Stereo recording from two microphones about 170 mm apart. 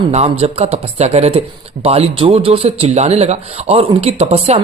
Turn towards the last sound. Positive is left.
turn(degrees=-35)  # may be behind; listen again after turning